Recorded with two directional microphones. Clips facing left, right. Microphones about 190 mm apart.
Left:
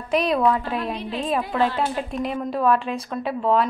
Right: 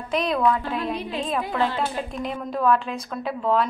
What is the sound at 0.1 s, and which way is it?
Speech, 5° left (ahead or behind).